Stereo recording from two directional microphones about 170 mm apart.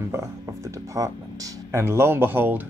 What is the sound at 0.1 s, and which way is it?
Speech, 15° right (ahead or behind).